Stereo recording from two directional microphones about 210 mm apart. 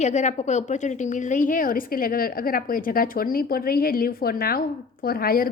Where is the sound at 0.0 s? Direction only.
35° left (ahead or behind).